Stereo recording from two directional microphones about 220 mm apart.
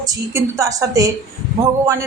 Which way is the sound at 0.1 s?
15° right (ahead or behind).